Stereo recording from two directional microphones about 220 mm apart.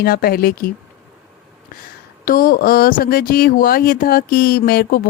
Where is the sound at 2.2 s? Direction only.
40° left (ahead or behind).